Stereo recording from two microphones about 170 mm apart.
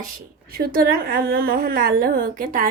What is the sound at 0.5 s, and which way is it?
A woman's voice, 60° right (ahead or behind).